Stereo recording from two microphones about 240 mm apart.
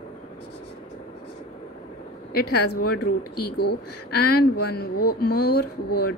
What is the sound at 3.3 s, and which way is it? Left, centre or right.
Speech, left.